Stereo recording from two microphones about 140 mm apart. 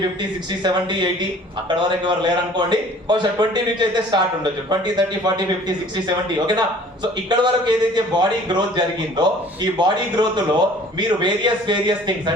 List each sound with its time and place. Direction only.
0.6 s a man's voice: 30° right (ahead or behind)